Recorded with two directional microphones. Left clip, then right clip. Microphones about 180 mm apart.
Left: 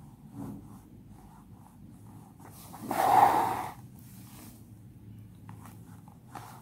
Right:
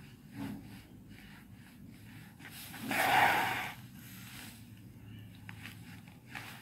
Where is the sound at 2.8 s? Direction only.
25° left (ahead or behind).